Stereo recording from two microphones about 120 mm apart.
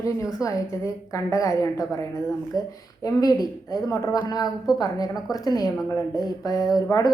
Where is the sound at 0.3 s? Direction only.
25° left (ahead or behind).